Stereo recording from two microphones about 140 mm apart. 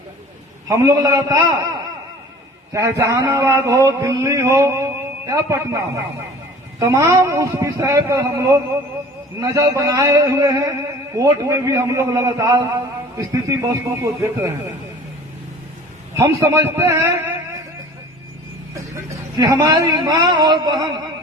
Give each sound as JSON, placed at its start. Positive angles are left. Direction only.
{"t": 0.7, "sound": "a man's voice", "side_deg": -25}
{"t": 2.7, "sound": "a man's voice", "side_deg": -20}
{"t": 16.1, "sound": "a man's voice", "side_deg": -20}
{"t": 19.4, "sound": "a man's voice", "side_deg": -30}